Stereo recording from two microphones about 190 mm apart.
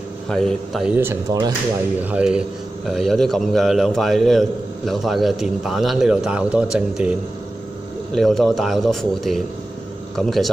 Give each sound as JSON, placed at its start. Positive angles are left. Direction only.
{"t": 0.3, "sound": "a man's voice", "side_deg": 0}
{"t": 0.9, "sound": "a man's voice", "side_deg": -15}